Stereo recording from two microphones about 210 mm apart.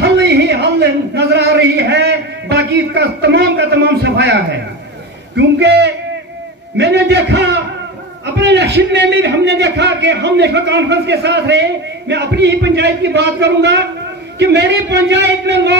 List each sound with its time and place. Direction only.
0.0 s a sound: 55° right (ahead or behind)
5.3 s a man's voice: 55° right (ahead or behind)
8.4 s a man's voice: 55° right (ahead or behind)